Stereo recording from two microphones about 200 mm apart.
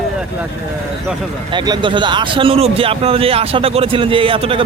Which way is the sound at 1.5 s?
20° right (ahead or behind).